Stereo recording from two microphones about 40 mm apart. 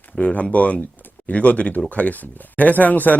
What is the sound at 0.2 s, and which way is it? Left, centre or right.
Speech, left.